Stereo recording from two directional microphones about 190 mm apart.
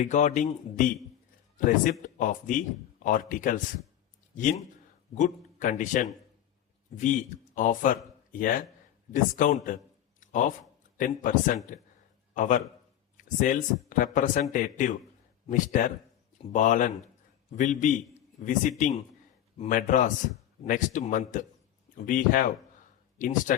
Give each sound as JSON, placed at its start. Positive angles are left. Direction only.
{"t": 0.0, "sound": "a man's voice", "side_deg": 40}
{"t": 10.2, "sound": "a sound", "side_deg": 40}
{"t": 10.9, "sound": "a man's voice", "side_deg": 45}